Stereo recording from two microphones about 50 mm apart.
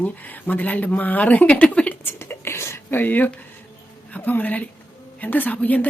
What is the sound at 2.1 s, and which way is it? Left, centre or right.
Whispering, left.